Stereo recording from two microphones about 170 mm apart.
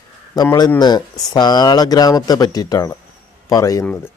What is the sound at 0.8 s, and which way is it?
Speech, 25° left (ahead or behind).